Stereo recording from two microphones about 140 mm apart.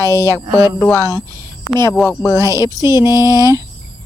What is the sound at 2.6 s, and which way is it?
Speech, 25° right (ahead or behind).